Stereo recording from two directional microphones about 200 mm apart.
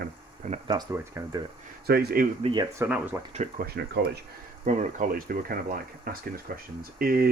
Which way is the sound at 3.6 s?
50° right (ahead or behind).